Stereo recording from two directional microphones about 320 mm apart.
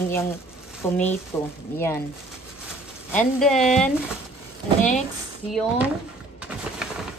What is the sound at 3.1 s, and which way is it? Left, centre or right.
Speech, centre.